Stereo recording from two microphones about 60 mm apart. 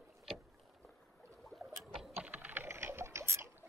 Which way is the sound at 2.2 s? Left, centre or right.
Right.